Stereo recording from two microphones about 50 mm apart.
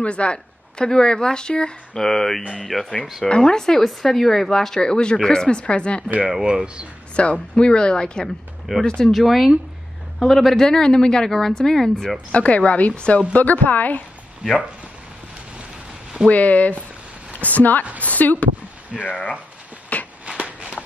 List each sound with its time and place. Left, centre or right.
0.0 s a woman's voice: left
2.0 s a woman's voice: centre
3.3 s a woman's voice: centre
6.2 s speech: centre
7.2 s a woman's voice: left
9.1 s a woman's voice: centre
12.3 s a woman's voice: left
16.3 s a woman's voice: left
19.9 s a sound: left
20.3 s a sound: right